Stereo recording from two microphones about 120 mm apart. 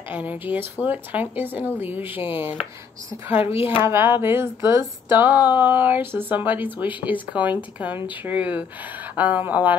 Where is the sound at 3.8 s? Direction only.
20° right (ahead or behind).